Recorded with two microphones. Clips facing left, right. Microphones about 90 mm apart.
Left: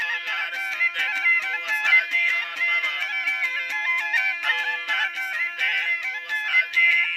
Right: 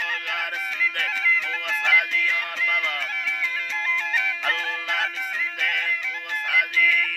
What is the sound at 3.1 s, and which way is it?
Music, 60° left (ahead or behind).